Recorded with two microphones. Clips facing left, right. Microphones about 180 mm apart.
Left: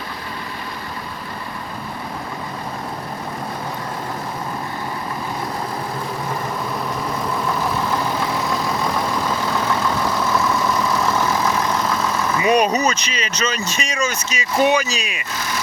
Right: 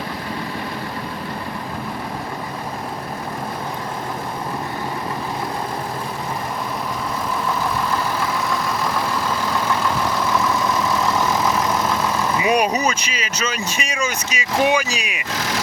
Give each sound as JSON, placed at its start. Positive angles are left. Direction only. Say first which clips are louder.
{"t": 12.4, "sound": "speech", "louder": "left 3 dB", "side_deg": -10}
{"t": 15.3, "sound": "vehicle", "louder": "right 3 dB", "side_deg": -90}